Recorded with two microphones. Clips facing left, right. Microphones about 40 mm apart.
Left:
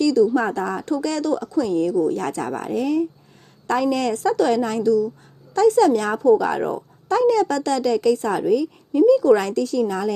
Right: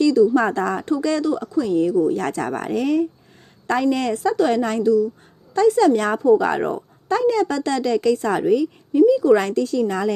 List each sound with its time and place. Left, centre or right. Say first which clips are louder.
0.0 s a woman's voice: right 2 dB; right
0.3 s speech: right 2 dB; right
0.9 s a woman's voice: right 2 dB; right
1.2 s speech: even; centre
1.7 s a woman's voice: right 3 dB; right
2.1 s a woman's voice: right 2 dB; right
4.8 s a woman's voice: right 1 dB; right
6.6 s a woman's voice: right 1 dB; right
7.1 s a woman's voice: left 1 dB; right
8.9 s speech: even; centre
9.4 s a woman's voice: right 1 dB; right